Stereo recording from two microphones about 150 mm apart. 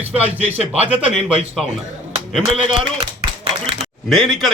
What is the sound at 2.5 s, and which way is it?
Speech, 35° right (ahead or behind).